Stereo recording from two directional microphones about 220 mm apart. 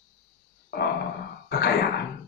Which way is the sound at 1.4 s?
45° left (ahead or behind).